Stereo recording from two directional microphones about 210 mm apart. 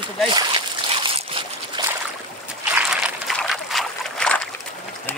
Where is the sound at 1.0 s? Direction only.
25° right (ahead or behind).